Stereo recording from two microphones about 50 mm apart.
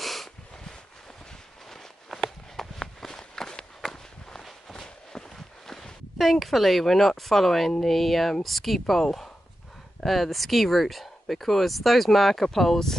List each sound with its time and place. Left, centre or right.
0.0 s a sound: centre
2.1 s walk: centre
5.7 s speech: centre